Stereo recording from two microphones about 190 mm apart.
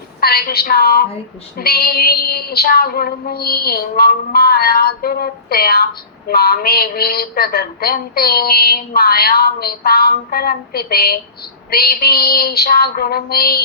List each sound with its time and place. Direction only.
0.2 s female singing: 55° left (ahead or behind)